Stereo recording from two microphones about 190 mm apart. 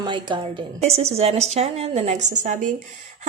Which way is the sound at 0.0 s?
25° right (ahead or behind).